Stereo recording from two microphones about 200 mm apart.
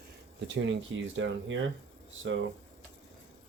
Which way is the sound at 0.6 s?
65° right (ahead or behind).